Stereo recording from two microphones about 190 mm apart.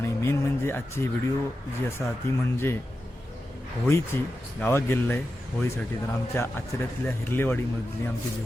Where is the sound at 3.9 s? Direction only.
10° left (ahead or behind).